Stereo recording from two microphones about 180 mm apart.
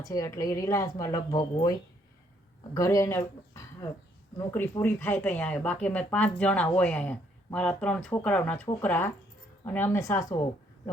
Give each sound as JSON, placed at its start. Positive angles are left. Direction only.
{"t": 0.0, "sound": "speech", "side_deg": 20}
{"t": 2.7, "sound": "speech", "side_deg": 15}